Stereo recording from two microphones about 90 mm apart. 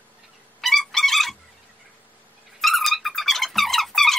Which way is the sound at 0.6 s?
5° left (ahead or behind).